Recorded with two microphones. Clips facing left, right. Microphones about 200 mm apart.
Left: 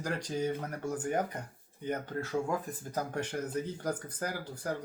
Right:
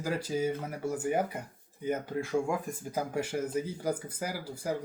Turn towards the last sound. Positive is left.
turn(degrees=-5)  # may be behind; listen again after turning